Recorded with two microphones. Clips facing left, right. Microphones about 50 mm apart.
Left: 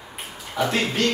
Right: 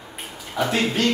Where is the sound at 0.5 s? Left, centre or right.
Centre.